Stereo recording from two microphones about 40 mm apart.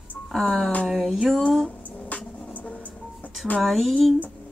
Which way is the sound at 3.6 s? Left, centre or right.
Centre.